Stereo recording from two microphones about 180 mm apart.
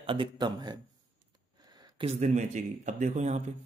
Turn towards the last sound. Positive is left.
turn(degrees=-40)  # may be behind; listen again after turning